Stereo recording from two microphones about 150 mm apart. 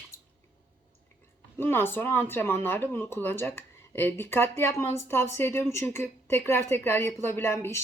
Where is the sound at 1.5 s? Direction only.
15° left (ahead or behind).